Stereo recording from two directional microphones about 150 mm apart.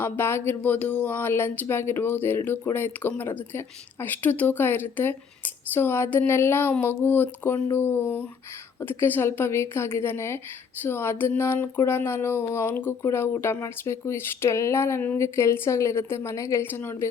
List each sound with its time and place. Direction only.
0.0 s speech: 15° left (ahead or behind)